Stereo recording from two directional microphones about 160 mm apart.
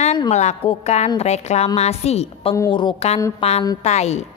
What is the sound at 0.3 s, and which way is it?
A woman's voice, 45° left (ahead or behind).